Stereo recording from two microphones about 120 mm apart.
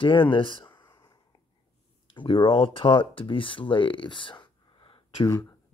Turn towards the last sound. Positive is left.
turn(degrees=40)  # may be behind; listen again after turning